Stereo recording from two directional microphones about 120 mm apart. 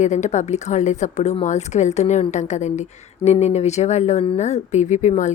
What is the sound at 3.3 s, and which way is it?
A woman's voice, 65° left (ahead or behind).